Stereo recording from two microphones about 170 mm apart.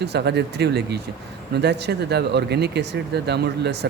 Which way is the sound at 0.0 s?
75° right (ahead or behind).